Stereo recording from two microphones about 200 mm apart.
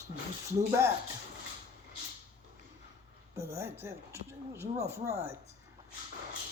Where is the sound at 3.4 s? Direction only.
15° right (ahead or behind).